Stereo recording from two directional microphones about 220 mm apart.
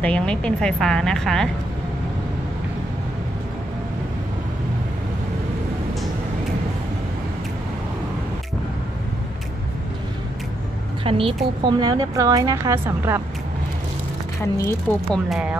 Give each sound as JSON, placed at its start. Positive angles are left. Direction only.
{"t": 0.0, "sound": "speech", "side_deg": 5}
{"t": 11.1, "sound": "speech", "side_deg": -25}
{"t": 14.4, "sound": "speech", "side_deg": 10}